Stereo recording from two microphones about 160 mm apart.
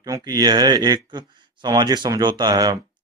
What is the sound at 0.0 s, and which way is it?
Speech, 25° right (ahead or behind).